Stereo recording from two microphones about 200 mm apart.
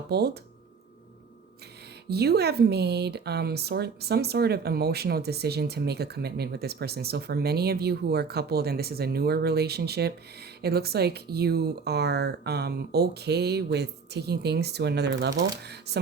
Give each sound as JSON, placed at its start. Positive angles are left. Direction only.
{"t": 0.1, "sound": "speech", "side_deg": -55}
{"t": 2.0, "sound": "speech", "side_deg": -55}